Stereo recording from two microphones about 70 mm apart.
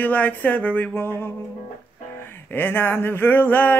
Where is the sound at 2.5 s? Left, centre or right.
Left.